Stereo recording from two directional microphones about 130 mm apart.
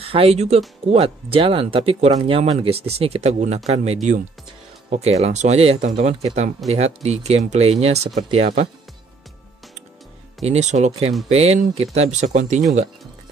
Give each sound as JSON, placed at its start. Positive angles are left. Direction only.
{"t": 0.0, "sound": "speech", "side_deg": -50}
{"t": 10.4, "sound": "speech", "side_deg": -60}